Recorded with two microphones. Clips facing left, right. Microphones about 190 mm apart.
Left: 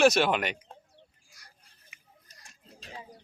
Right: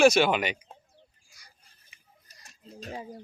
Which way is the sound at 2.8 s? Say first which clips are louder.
Right 7 dB; 45° right (ahead or behind).